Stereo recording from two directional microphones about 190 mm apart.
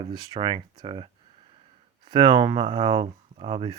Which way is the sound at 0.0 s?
25° right (ahead or behind).